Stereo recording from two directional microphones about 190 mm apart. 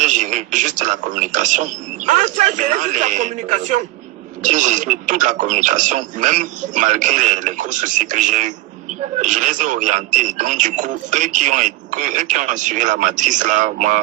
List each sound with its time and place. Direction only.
0.0 s speech: 40° right (ahead or behind)